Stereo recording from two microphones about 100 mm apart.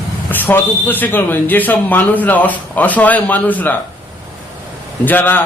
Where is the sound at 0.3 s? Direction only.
20° left (ahead or behind).